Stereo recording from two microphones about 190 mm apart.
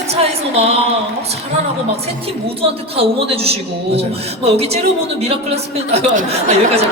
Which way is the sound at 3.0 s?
30° right (ahead or behind).